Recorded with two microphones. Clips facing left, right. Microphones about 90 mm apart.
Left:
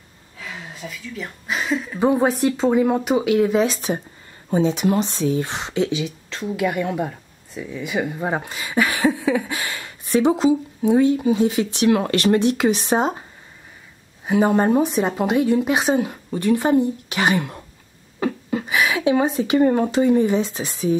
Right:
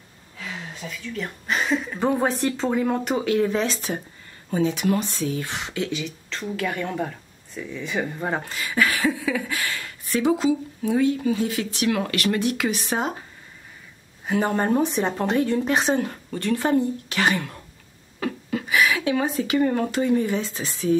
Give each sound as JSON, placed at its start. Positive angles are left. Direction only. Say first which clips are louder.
{"t": 0.4, "sound": "a sound", "louder": "left 1 dB", "side_deg": 0}
{"t": 2.0, "sound": "speech", "louder": "left 7 dB", "side_deg": 10}
{"t": 14.2, "sound": "speech", "louder": "left 5 dB", "side_deg": 15}